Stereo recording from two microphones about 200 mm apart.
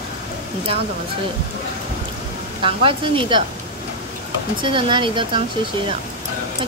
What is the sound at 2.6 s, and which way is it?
Speech, 25° right (ahead or behind).